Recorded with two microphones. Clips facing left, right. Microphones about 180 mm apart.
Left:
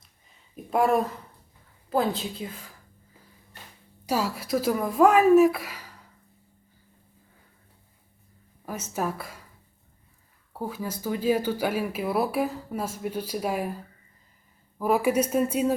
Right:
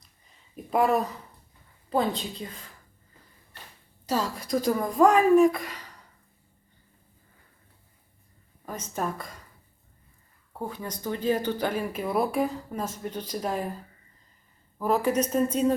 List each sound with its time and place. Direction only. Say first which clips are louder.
0.0 s a sound: even; centre (ahead or behind)
1.9 s a woman's voice: left 1 dB; centre (ahead or behind)
8.6 s speech: left 2 dB; 10° left (ahead or behind)
10.5 s speech: left 2 dB; 5° left (ahead or behind)
14.8 s speech: left 2 dB; 10° left (ahead or behind)